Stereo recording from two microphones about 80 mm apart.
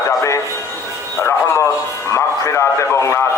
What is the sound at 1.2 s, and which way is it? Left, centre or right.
A man's voice, left.